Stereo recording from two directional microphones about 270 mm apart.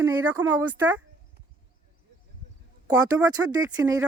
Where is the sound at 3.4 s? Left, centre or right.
Centre.